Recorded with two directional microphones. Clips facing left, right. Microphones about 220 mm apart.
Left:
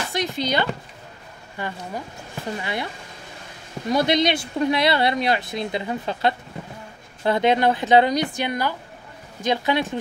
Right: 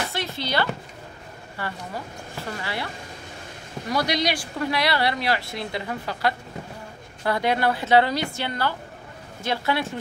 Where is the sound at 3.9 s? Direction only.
25° left (ahead or behind).